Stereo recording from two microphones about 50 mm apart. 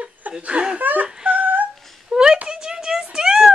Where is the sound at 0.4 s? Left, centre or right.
Right.